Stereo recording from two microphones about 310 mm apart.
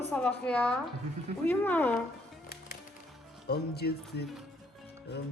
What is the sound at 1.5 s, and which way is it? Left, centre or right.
Speech, centre.